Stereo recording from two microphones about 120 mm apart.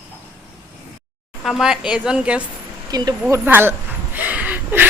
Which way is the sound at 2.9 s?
35° right (ahead or behind).